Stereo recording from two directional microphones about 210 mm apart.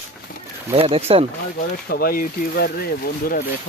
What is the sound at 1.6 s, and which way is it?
Speech, 45° left (ahead or behind).